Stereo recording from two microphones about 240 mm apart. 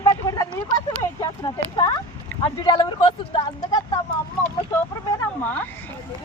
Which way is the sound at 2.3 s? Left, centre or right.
Centre.